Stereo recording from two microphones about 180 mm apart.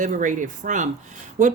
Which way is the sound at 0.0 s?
45° right (ahead or behind).